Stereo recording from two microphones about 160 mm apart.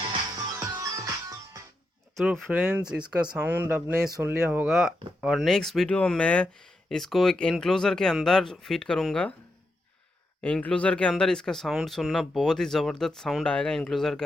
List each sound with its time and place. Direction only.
0.0 s music: 25° right (ahead or behind)
2.1 s speech: centre (ahead or behind)
2.5 s speech: 10° right (ahead or behind)
10.4 s speech: 10° left (ahead or behind)